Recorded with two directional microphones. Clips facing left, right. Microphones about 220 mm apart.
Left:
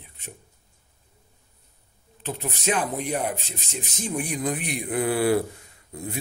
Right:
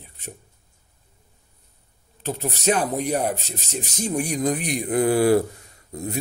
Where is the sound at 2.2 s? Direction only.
40° right (ahead or behind).